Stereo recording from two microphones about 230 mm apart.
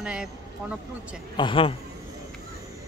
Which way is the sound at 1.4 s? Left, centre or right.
Left.